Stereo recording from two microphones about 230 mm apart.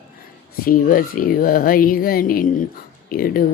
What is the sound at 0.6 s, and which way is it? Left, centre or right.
Speech, left.